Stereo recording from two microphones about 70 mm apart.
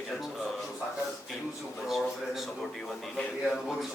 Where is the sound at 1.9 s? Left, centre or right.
Centre.